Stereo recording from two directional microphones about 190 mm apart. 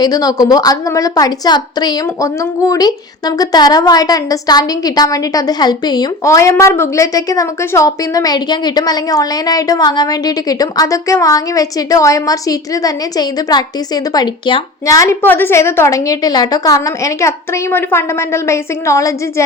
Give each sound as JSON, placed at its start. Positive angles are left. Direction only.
{"t": 0.0, "sound": "a woman's voice", "side_deg": 20}